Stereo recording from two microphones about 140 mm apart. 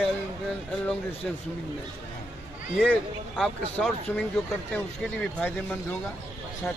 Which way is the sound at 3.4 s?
10° left (ahead or behind).